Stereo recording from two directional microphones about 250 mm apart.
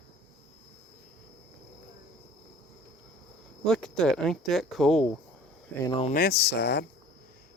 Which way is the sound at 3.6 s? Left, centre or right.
Centre.